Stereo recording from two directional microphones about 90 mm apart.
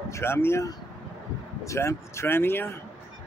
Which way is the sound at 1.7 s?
30° left (ahead or behind).